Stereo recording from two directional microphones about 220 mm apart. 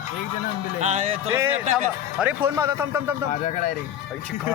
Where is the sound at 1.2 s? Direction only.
10° right (ahead or behind).